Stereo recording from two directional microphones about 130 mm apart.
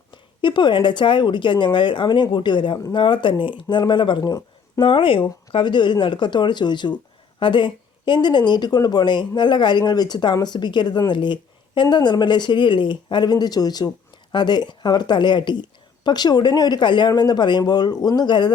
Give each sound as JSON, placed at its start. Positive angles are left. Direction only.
{"t": 0.1, "sound": "speech", "side_deg": 40}